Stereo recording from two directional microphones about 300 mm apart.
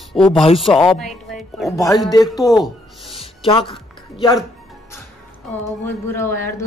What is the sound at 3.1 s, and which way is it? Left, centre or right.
Music, centre.